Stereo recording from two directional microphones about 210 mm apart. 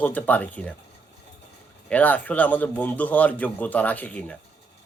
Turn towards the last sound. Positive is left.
turn(degrees=5)  # may be behind; listen again after turning